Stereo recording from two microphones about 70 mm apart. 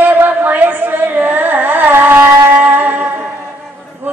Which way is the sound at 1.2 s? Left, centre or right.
Right.